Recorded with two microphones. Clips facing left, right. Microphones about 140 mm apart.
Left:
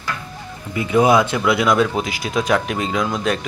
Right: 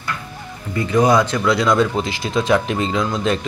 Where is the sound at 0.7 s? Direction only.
10° left (ahead or behind).